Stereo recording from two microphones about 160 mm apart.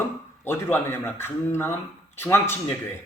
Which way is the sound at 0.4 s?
15° left (ahead or behind).